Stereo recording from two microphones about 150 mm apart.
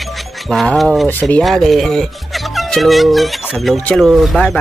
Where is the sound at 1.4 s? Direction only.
Centre (ahead or behind).